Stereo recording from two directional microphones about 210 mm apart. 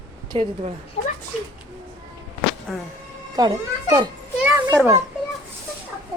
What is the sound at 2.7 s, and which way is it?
Speech, centre (ahead or behind).